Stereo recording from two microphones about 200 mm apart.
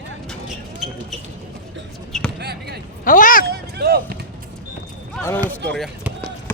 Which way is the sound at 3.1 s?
40° left (ahead or behind).